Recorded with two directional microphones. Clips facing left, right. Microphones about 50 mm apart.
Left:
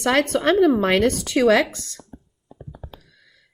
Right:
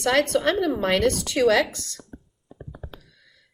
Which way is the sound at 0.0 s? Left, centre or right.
Left.